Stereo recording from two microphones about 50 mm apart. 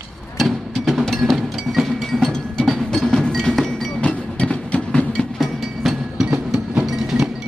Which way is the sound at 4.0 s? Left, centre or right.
Left.